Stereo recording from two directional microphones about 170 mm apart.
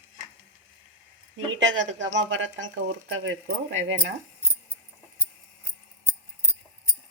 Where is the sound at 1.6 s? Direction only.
90° right.